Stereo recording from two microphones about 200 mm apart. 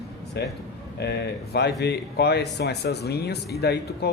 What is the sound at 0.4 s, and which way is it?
Speech, 55° left (ahead or behind).